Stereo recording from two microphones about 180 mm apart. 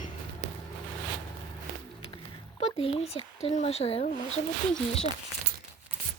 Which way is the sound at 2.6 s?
35° left (ahead or behind).